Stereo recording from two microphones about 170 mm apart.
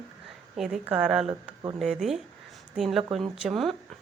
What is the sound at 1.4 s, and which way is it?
Speech, 30° right (ahead or behind).